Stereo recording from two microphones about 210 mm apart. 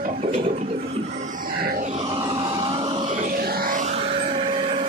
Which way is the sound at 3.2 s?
45° right (ahead or behind).